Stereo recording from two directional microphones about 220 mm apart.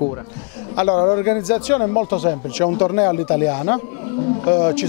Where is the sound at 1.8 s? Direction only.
25° left (ahead or behind).